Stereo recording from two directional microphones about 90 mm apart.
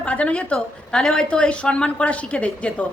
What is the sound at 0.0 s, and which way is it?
A woman's voice, 15° left (ahead or behind).